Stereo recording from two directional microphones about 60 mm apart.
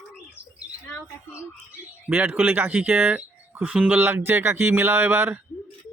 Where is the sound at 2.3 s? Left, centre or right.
Right.